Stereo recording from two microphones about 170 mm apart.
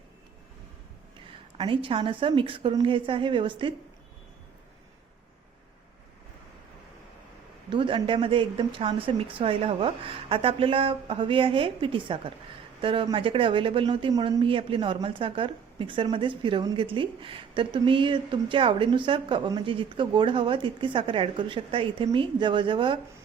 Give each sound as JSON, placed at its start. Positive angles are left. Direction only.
{"t": 1.5, "sound": "speech", "side_deg": -30}
{"t": 7.7, "sound": "speech", "side_deg": -30}